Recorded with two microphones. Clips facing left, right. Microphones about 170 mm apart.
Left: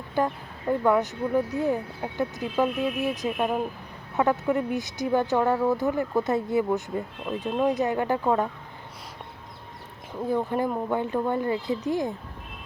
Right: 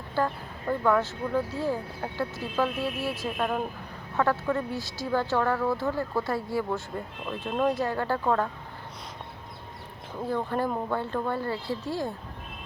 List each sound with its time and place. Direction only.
0.2 s speech: 20° left (ahead or behind)
10.2 s speech: 15° left (ahead or behind)